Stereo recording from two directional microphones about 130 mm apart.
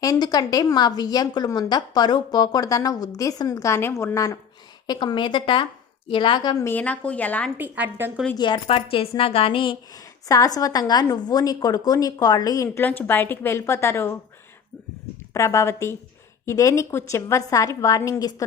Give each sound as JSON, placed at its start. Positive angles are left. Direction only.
{"t": 0.0, "sound": "a woman's voice", "side_deg": 30}
{"t": 4.9, "sound": "a woman's voice", "side_deg": 35}
{"t": 6.6, "sound": "a woman's voice", "side_deg": 15}
{"t": 7.6, "sound": "speech", "side_deg": -15}
{"t": 8.4, "sound": "a woman's voice", "side_deg": 35}
{"t": 8.6, "sound": "a woman's voice", "side_deg": 45}
{"t": 9.9, "sound": "a woman's voice", "side_deg": 25}
{"t": 12.8, "sound": "a woman's voice", "side_deg": 15}
{"t": 15.3, "sound": "a woman's voice", "side_deg": 20}